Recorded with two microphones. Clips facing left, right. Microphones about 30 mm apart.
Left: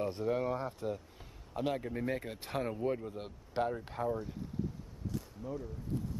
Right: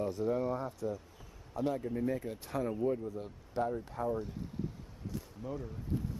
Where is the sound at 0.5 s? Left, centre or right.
Left.